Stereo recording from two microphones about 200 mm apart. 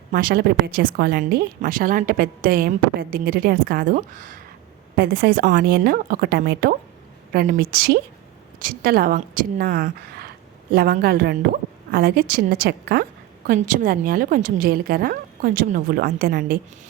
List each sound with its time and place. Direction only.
0.1 s a woman's voice: 45° right (ahead or behind)